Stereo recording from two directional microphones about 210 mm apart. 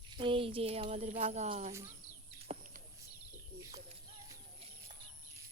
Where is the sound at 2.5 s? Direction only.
30° right (ahead or behind).